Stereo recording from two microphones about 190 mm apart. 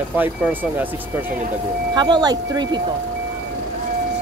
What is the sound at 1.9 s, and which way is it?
Speech, 25° right (ahead or behind).